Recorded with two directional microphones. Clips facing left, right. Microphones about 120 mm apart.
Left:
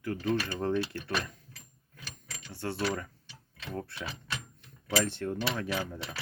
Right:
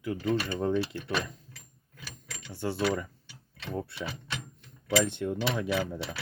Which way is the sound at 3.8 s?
15° right (ahead or behind).